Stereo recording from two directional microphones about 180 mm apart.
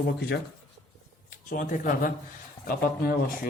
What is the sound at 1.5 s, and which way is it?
Speech, 50° left (ahead or behind).